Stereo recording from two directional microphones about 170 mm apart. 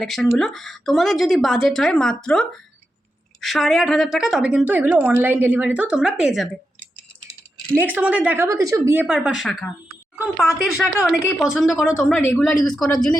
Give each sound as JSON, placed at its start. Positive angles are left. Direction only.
{"t": 0.0, "sound": "a woman's voice", "side_deg": 5}
{"t": 7.8, "sound": "a woman's voice", "side_deg": -10}